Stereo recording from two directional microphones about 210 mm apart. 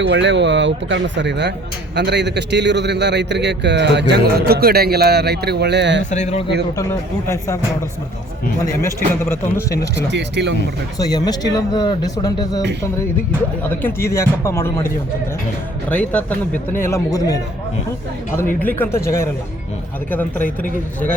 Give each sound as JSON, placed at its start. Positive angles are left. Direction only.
{"t": 0.0, "sound": "a man's voice", "side_deg": -55}
{"t": 6.1, "sound": "speech", "side_deg": 35}
{"t": 7.3, "sound": "speech", "side_deg": 15}
{"t": 8.6, "sound": "speech", "side_deg": 10}
{"t": 10.1, "sound": "a man's voice", "side_deg": -55}
{"t": 10.9, "sound": "speech", "side_deg": 20}
{"t": 13.7, "sound": "speech", "side_deg": 10}